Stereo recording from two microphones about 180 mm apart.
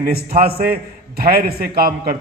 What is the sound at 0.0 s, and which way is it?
A man's voice, 55° right (ahead or behind).